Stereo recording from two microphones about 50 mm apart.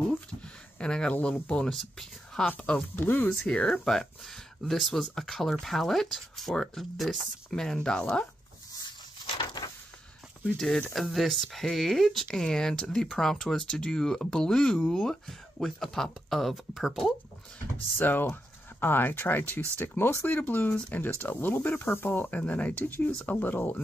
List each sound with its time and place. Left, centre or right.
0.7 s speech: centre
1.7 s speech: centre
2.7 s speech: centre
3.0 s speech: left
3.3 s speech: centre
6.8 s speech: centre
7.5 s speech: centre
11.0 s speech: centre
17.9 s speech: left
19.8 s speech: left
20.3 s speech: left
21.8 s speech: left